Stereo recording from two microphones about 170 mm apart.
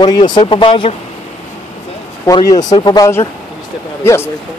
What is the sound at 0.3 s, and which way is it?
Speech, 30° left (ahead or behind).